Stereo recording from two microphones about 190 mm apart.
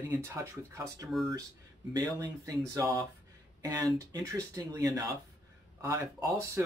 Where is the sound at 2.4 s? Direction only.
15° right (ahead or behind).